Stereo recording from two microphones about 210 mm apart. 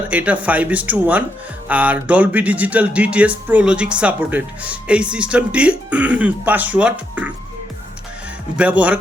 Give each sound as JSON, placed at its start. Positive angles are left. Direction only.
{"t": 0.1, "sound": "speech", "side_deg": -5}
{"t": 8.5, "sound": "speech", "side_deg": -5}